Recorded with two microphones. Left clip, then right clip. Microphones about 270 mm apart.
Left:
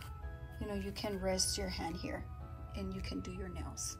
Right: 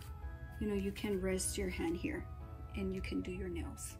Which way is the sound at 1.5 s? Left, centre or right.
Centre.